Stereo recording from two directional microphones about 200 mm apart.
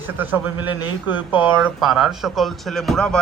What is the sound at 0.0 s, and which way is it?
A man's voice, 10° right (ahead or behind).